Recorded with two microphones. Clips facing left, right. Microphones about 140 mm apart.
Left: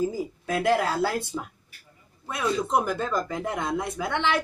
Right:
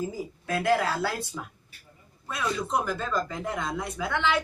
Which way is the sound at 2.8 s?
20° left (ahead or behind).